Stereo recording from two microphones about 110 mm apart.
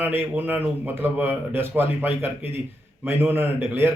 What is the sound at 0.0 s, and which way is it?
Speech, 20° right (ahead or behind).